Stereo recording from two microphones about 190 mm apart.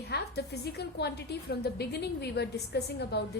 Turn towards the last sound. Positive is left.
turn(degrees=60)  # may be behind; listen again after turning